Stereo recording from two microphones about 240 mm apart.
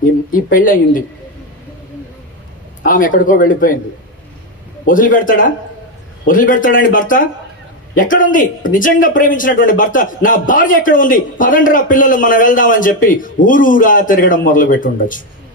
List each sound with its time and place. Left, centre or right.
0.0 s a man's voice: left
2.8 s a man's voice: left
4.8 s a man's voice: left